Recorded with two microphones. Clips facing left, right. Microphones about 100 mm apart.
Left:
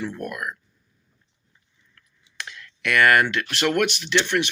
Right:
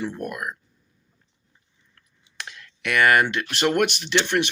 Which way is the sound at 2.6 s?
35° right (ahead or behind).